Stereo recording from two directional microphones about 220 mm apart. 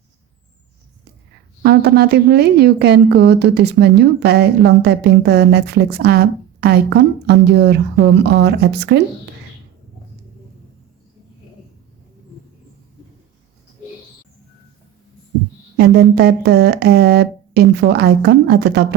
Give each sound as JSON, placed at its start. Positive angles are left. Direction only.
{"t": 1.6, "sound": "a woman's voice", "side_deg": -45}
{"t": 15.8, "sound": "a woman's voice", "side_deg": -45}